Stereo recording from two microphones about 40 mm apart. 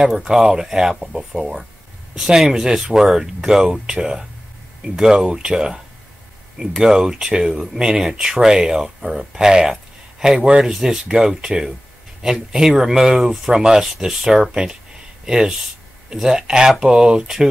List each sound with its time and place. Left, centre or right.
0.2 s speech: centre
6.8 s speech: centre